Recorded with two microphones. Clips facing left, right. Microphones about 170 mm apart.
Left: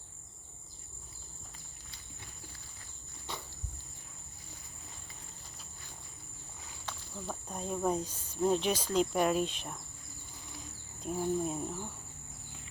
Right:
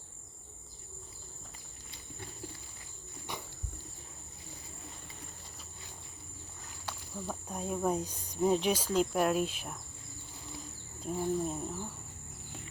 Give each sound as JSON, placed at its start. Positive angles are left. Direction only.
{"t": 3.3, "sound": "cricket", "side_deg": -15}
{"t": 6.8, "sound": "speech", "side_deg": -10}
{"t": 8.4, "sound": "cricket", "side_deg": -5}
{"t": 11.0, "sound": "cricket", "side_deg": 0}